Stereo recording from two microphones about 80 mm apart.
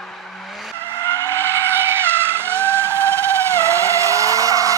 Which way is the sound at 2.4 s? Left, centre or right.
Right.